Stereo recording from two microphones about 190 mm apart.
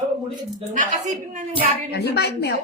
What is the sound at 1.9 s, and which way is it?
Speech, 60° left (ahead or behind).